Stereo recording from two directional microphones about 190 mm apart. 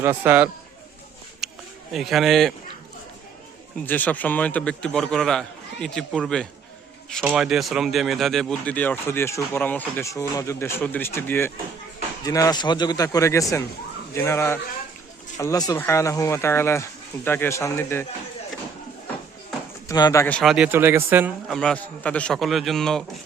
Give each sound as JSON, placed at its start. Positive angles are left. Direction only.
{"t": 0.0, "sound": "speech", "side_deg": -10}
{"t": 1.4, "sound": "a sound", "side_deg": 0}
{"t": 1.9, "sound": "a man's voice", "side_deg": 0}
{"t": 3.8, "sound": "a man's voice", "side_deg": 10}
{"t": 19.9, "sound": "a man's voice", "side_deg": 20}
{"t": 20.2, "sound": "speech", "side_deg": 5}
{"t": 21.5, "sound": "a man's voice", "side_deg": 5}